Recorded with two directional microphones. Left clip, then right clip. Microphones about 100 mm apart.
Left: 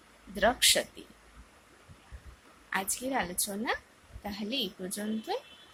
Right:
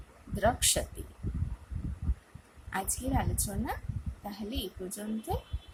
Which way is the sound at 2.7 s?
Centre (ahead or behind).